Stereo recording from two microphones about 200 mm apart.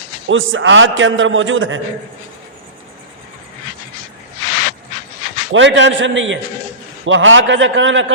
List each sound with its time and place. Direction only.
0.3 s a man's voice: 75° right (ahead or behind)
5.5 s a man's voice: 65° right (ahead or behind)